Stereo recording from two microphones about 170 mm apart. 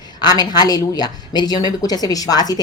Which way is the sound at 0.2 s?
25° left (ahead or behind).